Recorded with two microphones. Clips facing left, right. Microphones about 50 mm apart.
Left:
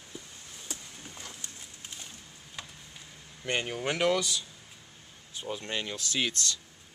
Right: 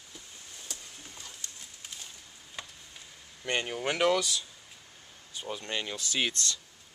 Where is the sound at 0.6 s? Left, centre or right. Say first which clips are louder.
Left 3 dB; left.